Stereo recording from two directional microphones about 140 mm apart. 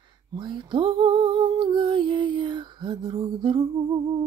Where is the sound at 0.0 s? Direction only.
35° right (ahead or behind).